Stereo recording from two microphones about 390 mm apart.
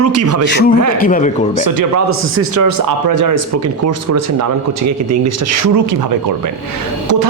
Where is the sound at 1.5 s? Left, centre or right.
Right.